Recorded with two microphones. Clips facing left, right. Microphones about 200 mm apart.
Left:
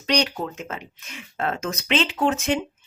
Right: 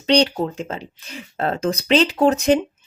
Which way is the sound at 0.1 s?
30° right (ahead or behind).